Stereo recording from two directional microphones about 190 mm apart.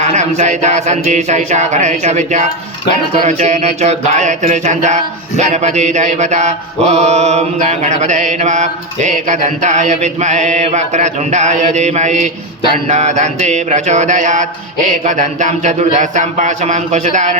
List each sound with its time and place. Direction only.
0.0 s mantra: 35° right (ahead or behind)